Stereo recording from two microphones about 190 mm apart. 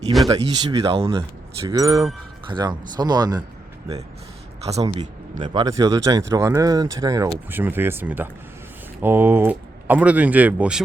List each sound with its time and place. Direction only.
0.3 s speech: 20° right (ahead or behind)
0.8 s speech: 30° right (ahead or behind)
1.6 s speech: 15° right (ahead or behind)
4.6 s speech: 35° right (ahead or behind)
5.4 s speech: 20° right (ahead or behind)